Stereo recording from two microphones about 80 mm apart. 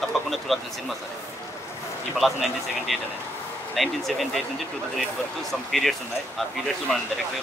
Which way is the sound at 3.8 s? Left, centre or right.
Centre.